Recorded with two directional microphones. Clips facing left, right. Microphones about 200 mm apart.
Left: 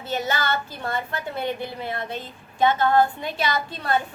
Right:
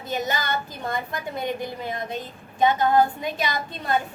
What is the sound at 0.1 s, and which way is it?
A woman's voice, 15° right (ahead or behind).